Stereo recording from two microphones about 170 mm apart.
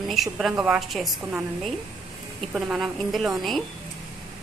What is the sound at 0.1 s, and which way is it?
A woman's voice, centre (ahead or behind).